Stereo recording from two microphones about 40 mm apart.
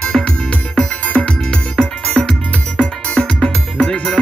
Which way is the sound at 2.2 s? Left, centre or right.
Centre.